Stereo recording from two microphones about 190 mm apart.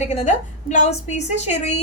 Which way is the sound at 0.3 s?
40° left (ahead or behind).